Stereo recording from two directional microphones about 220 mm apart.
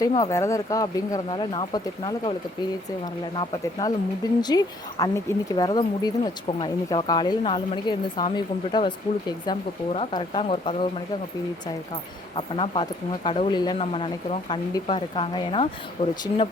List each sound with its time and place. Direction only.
0.0 s speech: 15° left (ahead or behind)
12.4 s speech: 25° left (ahead or behind)